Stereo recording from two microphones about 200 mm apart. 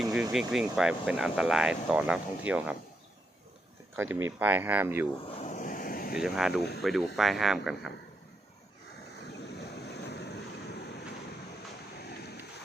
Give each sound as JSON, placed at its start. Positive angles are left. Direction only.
{"t": 0.0, "sound": "vehicle", "side_deg": 0}
{"t": 0.3, "sound": "speech", "side_deg": 0}
{"t": 3.9, "sound": "speech", "side_deg": -10}
{"t": 5.4, "sound": "a sound", "side_deg": 40}
{"t": 6.1, "sound": "speech", "side_deg": -5}
{"t": 6.6, "sound": "speech", "side_deg": 55}
{"t": 6.8, "sound": "speech", "side_deg": 0}
{"t": 9.6, "sound": "waves", "side_deg": 55}
{"t": 11.9, "sound": "boat", "side_deg": 55}